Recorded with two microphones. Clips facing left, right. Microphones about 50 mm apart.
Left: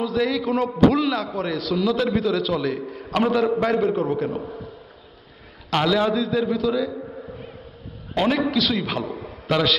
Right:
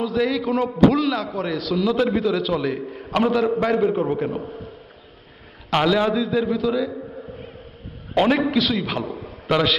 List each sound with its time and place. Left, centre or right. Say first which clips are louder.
0.0 s a man's voice: right 1 dB; centre
1.9 s a man's voice: right 2 dB; centre
5.7 s a man's voice: right 1 dB; centre
8.1 s a man's voice: right 3 dB; right
8.6 s a man's voice: even; centre